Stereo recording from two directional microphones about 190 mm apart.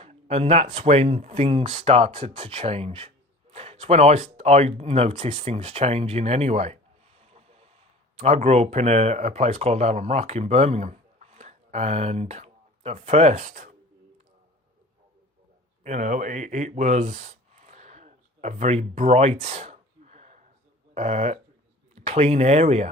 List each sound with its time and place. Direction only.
0.0 s speech: 35° right (ahead or behind)
7.2 s boat: 35° right (ahead or behind)
8.1 s speech: 35° right (ahead or behind)
15.8 s a sound: 40° right (ahead or behind)
20.9 s speech: 35° right (ahead or behind)